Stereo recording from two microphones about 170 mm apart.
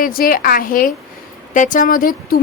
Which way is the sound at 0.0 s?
60° left (ahead or behind).